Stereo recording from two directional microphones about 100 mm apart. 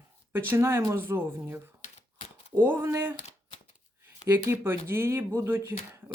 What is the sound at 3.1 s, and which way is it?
Typewriter, 85° left.